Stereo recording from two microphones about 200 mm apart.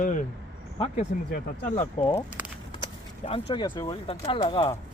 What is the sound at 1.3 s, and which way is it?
Speech, 45° left (ahead or behind).